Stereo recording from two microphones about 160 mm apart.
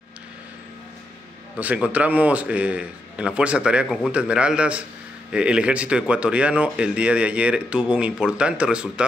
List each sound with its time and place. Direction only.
1.6 s speech: 10° right (ahead or behind)